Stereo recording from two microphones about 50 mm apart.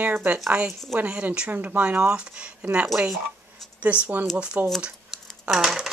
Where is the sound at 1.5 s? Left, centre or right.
Right.